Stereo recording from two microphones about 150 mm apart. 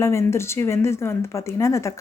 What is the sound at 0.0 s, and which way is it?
Speech, 20° left (ahead or behind).